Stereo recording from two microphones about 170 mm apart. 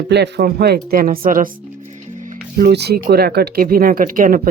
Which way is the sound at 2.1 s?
50° right (ahead or behind).